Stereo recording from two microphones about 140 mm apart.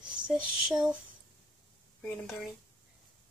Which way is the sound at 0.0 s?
5° right (ahead or behind).